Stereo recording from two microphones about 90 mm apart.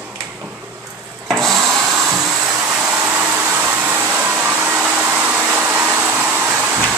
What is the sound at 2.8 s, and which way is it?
Hair dryer, 15° right (ahead or behind).